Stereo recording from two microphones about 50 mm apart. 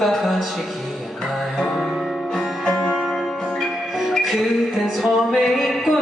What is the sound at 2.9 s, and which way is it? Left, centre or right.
Music, centre.